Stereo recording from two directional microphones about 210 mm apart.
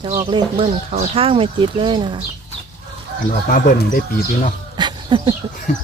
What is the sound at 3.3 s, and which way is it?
Speech, 40° left (ahead or behind).